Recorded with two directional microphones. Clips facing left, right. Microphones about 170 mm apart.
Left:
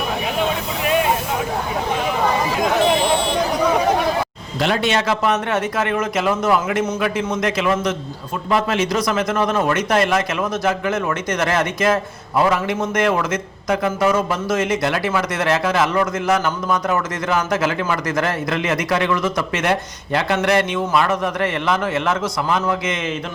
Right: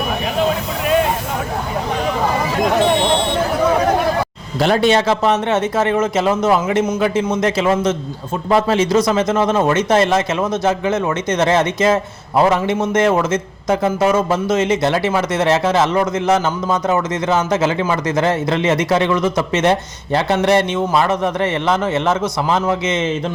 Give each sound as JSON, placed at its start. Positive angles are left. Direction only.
{"t": 4.6, "sound": "a man's voice", "side_deg": -35}